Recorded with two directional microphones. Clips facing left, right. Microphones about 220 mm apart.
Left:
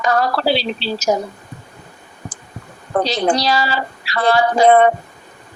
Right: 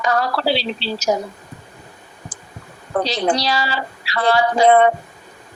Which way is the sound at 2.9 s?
45° left (ahead or behind).